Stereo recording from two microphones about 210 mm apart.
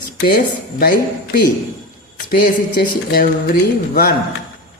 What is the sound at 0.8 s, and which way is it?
A woman's voice, 45° left (ahead or behind).